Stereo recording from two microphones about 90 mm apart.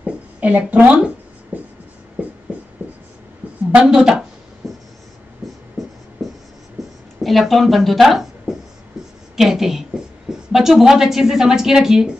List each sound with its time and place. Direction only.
0.0 s writing: 15° right (ahead or behind)
3.7 s a woman's voice: 10° right (ahead or behind)
4.6 s writing: centre (ahead or behind)
6.8 s a sound: centre (ahead or behind)
7.2 s a woman's voice: centre (ahead or behind)